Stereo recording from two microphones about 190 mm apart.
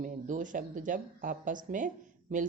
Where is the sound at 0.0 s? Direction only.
45° right (ahead or behind).